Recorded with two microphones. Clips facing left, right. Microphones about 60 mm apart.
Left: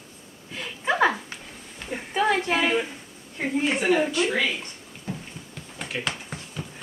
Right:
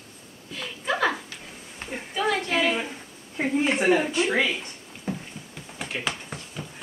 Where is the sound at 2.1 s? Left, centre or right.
Left.